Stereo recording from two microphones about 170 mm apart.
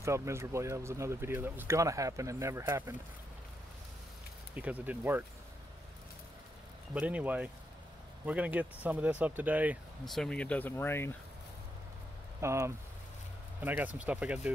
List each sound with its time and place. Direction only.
0.0 s speech: 15° right (ahead or behind)
4.6 s speech: 10° right (ahead or behind)
6.9 s speech: 10° right (ahead or behind)
10.0 s speech: centre (ahead or behind)
12.4 s speech: 15° right (ahead or behind)